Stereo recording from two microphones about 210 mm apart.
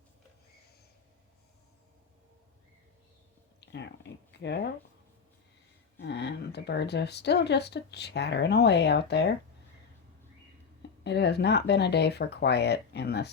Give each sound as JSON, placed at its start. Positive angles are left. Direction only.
{"t": 3.6, "sound": "a sound", "side_deg": 55}
{"t": 4.4, "sound": "speech", "side_deg": 50}
{"t": 6.0, "sound": "speech", "side_deg": 55}
{"t": 11.0, "sound": "speech", "side_deg": 55}